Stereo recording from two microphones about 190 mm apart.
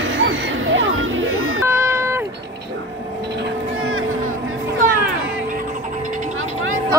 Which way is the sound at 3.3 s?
90° right.